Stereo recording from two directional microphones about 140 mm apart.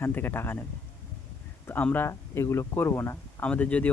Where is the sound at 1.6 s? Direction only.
15° left (ahead or behind).